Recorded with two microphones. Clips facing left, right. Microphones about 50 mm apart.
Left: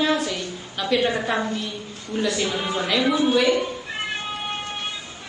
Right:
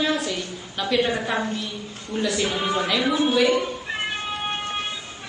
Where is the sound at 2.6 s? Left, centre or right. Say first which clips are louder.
Right 2 dB; right.